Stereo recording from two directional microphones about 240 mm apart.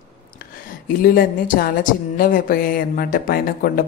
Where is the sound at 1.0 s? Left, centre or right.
Left.